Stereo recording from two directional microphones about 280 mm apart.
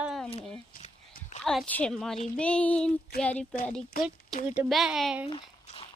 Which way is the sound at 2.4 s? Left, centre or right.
Centre.